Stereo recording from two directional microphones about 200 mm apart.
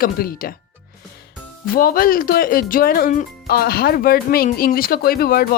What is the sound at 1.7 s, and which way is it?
Speech, 45° left (ahead or behind).